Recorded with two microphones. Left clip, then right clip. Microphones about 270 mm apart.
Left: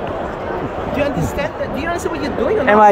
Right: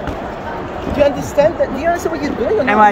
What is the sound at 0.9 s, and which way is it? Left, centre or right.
Speech, centre.